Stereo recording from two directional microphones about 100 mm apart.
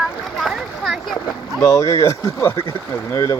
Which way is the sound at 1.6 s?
35° left (ahead or behind).